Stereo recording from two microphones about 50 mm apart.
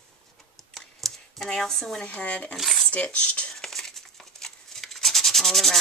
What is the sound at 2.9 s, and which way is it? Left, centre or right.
Cutlery, left.